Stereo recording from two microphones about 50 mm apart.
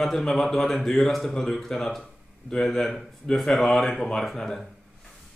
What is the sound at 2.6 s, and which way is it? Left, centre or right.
Speech, centre.